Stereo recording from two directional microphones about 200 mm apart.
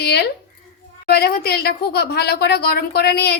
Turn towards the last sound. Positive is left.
turn(degrees=50)  # may be behind; listen again after turning